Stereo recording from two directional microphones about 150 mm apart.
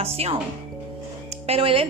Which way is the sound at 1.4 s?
40° right (ahead or behind).